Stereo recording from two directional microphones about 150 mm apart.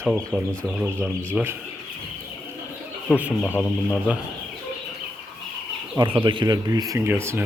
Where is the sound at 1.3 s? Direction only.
15° right (ahead or behind).